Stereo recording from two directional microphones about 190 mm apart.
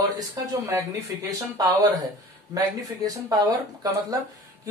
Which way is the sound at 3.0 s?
20° right (ahead or behind).